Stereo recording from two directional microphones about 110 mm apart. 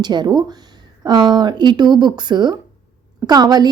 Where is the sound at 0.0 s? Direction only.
40° right (ahead or behind).